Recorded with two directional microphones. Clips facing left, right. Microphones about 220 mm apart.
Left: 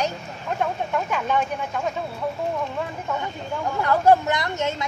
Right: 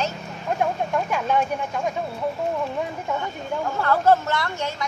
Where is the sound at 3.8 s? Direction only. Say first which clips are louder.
Left 2 dB; 15° left (ahead or behind).